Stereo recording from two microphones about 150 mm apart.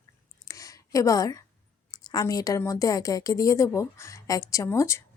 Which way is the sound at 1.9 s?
25° left (ahead or behind).